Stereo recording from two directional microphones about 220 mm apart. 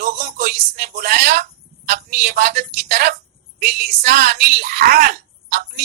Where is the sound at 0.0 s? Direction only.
40° right (ahead or behind).